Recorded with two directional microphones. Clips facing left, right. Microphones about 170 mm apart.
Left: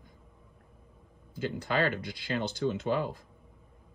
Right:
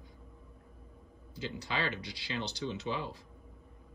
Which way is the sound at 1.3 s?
50° left (ahead or behind).